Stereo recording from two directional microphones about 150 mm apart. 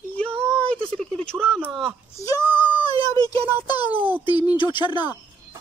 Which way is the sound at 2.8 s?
25° left (ahead or behind).